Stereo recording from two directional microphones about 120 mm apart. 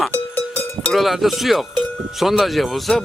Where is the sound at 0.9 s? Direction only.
Centre (ahead or behind).